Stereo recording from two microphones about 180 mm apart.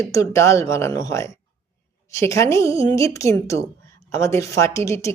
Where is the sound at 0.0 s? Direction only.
15° left (ahead or behind).